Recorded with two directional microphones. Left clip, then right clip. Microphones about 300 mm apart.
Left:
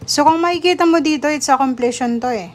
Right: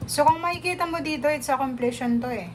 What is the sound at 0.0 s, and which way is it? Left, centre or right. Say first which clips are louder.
A woman's voice: left 7 dB; centre.